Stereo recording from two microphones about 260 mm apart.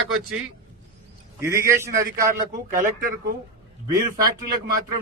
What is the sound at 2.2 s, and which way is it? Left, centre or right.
A man's voice, right.